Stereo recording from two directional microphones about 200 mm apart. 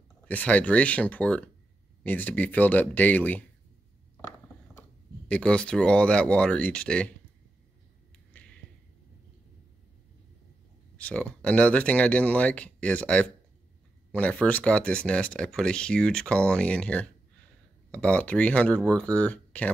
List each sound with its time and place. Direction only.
0.3 s speech: 5° left (ahead or behind)
5.3 s speech: 5° left (ahead or behind)
11.0 s speech: 5° left (ahead or behind)